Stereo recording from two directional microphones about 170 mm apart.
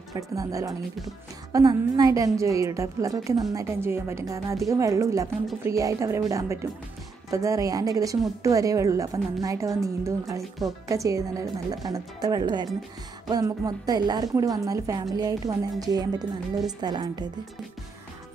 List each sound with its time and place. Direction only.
0.1 s a woman's voice: 20° right (ahead or behind)